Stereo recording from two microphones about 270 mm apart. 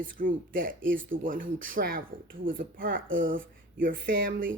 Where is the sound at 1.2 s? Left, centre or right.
Right.